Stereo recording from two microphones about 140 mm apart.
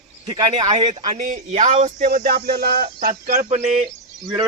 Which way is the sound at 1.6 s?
65° right (ahead or behind).